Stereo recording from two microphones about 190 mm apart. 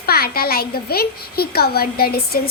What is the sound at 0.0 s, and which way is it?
A child's voice, 55° left (ahead or behind).